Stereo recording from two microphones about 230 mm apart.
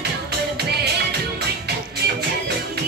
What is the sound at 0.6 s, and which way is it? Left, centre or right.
Music, right.